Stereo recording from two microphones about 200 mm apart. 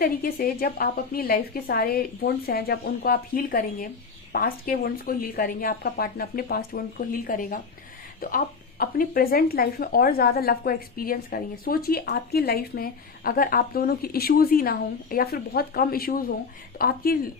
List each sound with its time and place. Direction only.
0.0 s a woman's voice: 45° left (ahead or behind)
8.8 s a woman's voice: 45° left (ahead or behind)